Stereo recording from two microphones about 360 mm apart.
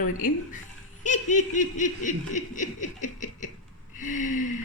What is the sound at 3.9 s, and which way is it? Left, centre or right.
Gasp, left.